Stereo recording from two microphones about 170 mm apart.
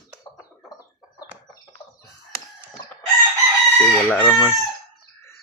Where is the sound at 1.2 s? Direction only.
25° left (ahead or behind).